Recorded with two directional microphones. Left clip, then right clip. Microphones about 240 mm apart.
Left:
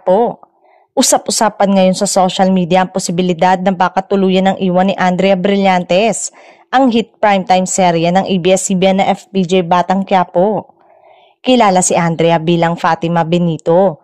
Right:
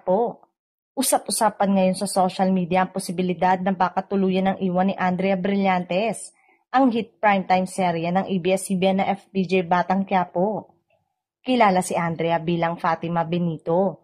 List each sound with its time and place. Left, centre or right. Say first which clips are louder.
0.0 s a woman's voice: left 10 dB; left